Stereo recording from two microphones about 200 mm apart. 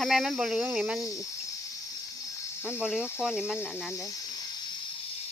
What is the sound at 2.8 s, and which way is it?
Speech, 5° right (ahead or behind).